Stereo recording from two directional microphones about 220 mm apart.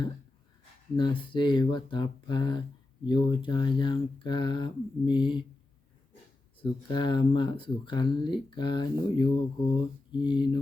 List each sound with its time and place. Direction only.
0.9 s speech: 20° left (ahead or behind)
6.6 s speech: 20° left (ahead or behind)